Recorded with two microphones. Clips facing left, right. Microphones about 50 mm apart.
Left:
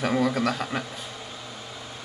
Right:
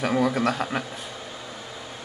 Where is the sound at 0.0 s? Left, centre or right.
Centre.